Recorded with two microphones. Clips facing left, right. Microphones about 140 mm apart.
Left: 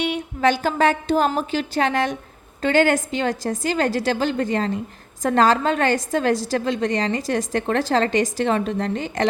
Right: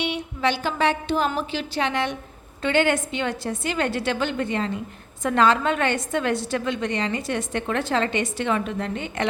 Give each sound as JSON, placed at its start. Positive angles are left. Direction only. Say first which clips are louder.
{"t": 0.0, "sound": "a woman's voice", "louder": "left 4 dB", "side_deg": 45}